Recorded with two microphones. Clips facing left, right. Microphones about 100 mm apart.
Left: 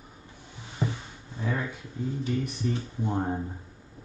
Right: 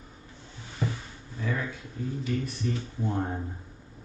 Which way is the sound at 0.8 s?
25° left (ahead or behind).